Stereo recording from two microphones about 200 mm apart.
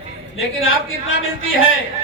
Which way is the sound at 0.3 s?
80° left.